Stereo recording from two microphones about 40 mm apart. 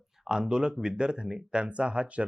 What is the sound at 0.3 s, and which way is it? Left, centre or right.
Speech, right.